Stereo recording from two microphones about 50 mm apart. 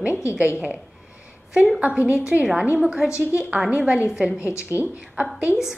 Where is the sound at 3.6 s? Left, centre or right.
Right.